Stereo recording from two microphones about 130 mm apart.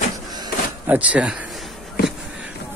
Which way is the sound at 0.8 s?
10° right (ahead or behind).